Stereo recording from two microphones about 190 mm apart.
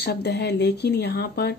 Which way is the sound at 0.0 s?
60° left (ahead or behind).